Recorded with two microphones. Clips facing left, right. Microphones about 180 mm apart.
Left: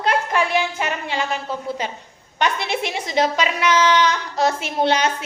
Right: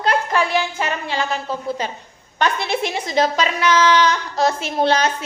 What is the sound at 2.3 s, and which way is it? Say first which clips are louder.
A woman's voice: right 2 dB; 20° left (ahead or behind).